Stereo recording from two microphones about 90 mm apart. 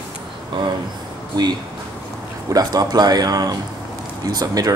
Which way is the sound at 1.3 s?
50° right (ahead or behind).